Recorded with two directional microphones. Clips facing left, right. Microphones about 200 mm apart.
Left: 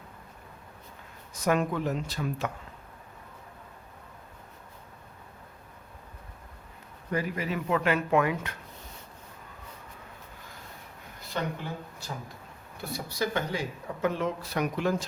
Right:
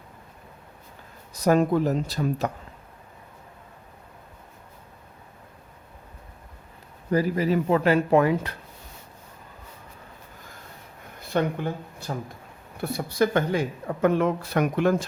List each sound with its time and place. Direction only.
1.3 s speech: 35° right (ahead or behind)
7.1 s speech: 35° right (ahead or behind)
11.3 s a woman's voice: 55° right (ahead or behind)